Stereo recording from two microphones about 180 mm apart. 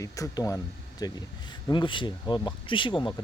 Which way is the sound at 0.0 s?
20° left (ahead or behind).